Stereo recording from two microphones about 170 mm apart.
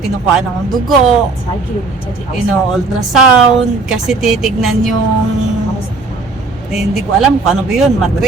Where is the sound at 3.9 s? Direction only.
Centre (ahead or behind).